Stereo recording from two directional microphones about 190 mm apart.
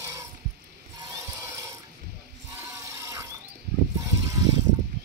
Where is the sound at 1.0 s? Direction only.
15° right (ahead or behind).